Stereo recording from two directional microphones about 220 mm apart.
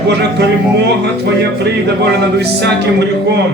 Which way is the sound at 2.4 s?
50° right (ahead or behind).